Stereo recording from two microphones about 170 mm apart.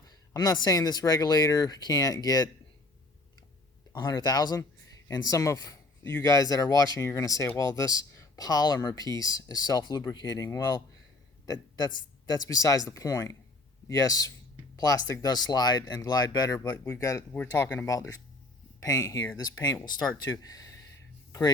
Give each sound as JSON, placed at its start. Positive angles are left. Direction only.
{"t": 0.1, "sound": "a man's voice", "side_deg": 25}
{"t": 3.9, "sound": "a man's voice", "side_deg": 25}